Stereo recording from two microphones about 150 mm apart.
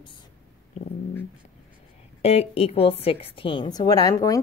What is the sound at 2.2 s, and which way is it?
A woman's voice, 45° left (ahead or behind).